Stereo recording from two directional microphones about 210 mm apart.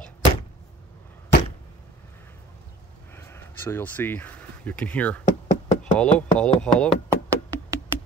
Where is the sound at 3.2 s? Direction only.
10° left (ahead or behind).